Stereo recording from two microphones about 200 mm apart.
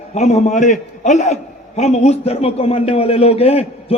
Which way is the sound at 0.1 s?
35° left (ahead or behind).